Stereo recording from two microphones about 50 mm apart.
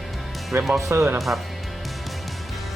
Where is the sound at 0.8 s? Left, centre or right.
Right.